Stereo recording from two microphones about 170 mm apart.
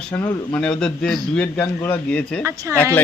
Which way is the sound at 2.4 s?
15° right (ahead or behind).